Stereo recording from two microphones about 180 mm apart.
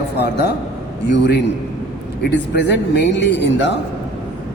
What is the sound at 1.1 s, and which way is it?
Speech, 75° left (ahead or behind).